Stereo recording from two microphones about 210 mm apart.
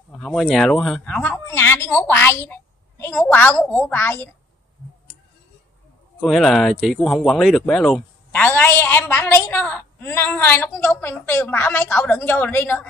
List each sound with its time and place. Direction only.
0.2 s a woman's voice: centre (ahead or behind)
6.2 s speech: centre (ahead or behind)